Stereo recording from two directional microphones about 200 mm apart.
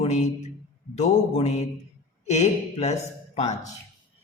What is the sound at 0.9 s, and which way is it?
Speech, 35° left (ahead or behind).